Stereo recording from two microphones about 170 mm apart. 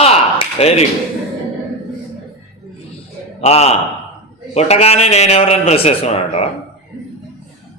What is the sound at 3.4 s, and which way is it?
A man's voice, 40° left (ahead or behind).